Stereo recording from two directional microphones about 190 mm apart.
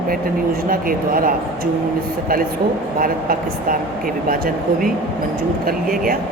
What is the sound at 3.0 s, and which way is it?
A woman's voice, 50° right (ahead or behind).